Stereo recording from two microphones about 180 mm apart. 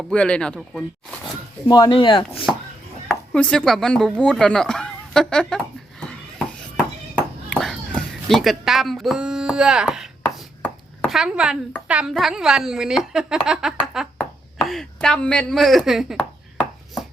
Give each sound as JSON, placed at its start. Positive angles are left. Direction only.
{"t": 0.0, "sound": "speech", "side_deg": 5}
{"t": 1.6, "sound": "speech", "side_deg": 25}
{"t": 3.1, "sound": "speech", "side_deg": 5}
{"t": 7.5, "sound": "a sound", "side_deg": 5}
{"t": 11.9, "sound": "speech", "side_deg": -5}